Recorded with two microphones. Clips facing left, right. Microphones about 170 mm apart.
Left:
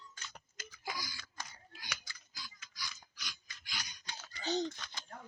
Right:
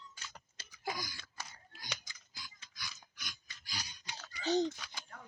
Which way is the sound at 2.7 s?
55° right (ahead or behind).